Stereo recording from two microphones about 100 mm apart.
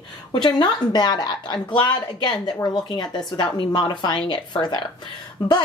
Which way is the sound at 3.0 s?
45° left (ahead or behind).